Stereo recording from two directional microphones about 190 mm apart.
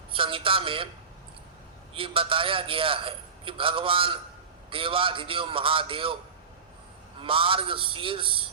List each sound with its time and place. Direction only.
0.1 s a man's voice: 30° right (ahead or behind)
1.9 s a man's voice: 30° right (ahead or behind)
7.2 s a man's voice: 25° right (ahead or behind)